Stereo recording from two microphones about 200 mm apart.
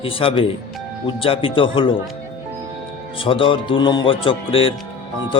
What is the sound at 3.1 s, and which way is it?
Speech, 25° left (ahead or behind).